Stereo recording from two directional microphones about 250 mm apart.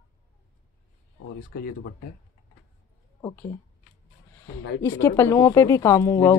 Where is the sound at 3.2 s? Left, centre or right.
Centre.